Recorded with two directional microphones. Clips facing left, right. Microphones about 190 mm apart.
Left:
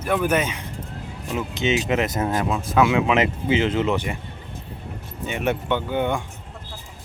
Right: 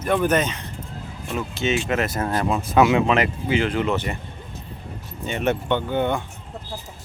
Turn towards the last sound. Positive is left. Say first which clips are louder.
# right 1 dB
turn(degrees=10)  # may be behind; listen again after turning